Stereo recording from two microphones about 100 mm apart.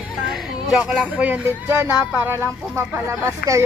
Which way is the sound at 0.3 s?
5° right (ahead or behind).